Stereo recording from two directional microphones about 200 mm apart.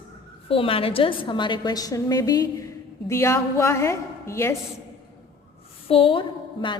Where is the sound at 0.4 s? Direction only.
25° left (ahead or behind).